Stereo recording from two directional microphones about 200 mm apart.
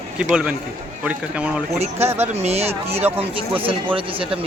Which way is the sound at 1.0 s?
5° right (ahead or behind).